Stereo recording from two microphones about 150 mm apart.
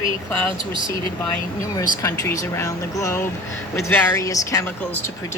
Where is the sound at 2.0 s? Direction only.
20° left (ahead or behind).